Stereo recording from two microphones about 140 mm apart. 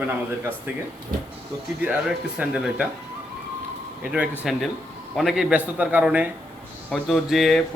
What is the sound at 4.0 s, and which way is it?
Speech, 10° right (ahead or behind).